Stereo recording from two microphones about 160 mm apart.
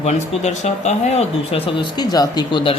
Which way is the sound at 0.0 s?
45° left (ahead or behind).